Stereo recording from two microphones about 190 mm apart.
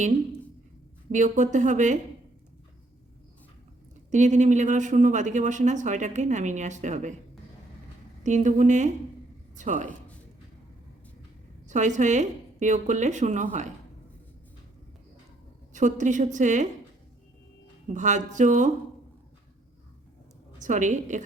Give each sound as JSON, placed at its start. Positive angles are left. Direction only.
{"t": 1.1, "sound": "speech", "side_deg": -40}
{"t": 4.1, "sound": "speech", "side_deg": -40}
{"t": 8.2, "sound": "speech", "side_deg": -40}
{"t": 11.7, "sound": "speech", "side_deg": -40}
{"t": 15.7, "sound": "speech", "side_deg": -40}
{"t": 17.8, "sound": "speech", "side_deg": -40}
{"t": 20.6, "sound": "speech", "side_deg": -40}